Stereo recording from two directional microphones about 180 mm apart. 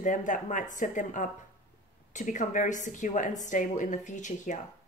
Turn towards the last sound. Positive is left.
turn(degrees=45)  # may be behind; listen again after turning